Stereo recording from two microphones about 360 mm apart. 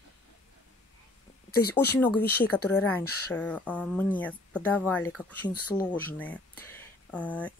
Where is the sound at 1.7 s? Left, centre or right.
Centre.